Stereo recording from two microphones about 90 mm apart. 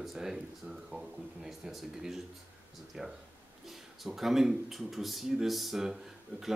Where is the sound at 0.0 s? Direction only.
5° right (ahead or behind).